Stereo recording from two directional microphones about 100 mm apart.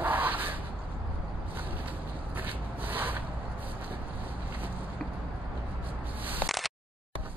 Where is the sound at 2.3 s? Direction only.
20° right (ahead or behind).